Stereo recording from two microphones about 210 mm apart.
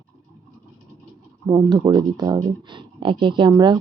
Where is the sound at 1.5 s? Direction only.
20° right (ahead or behind).